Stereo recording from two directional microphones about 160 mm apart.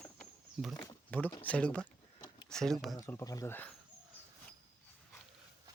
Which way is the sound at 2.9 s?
20° left (ahead or behind).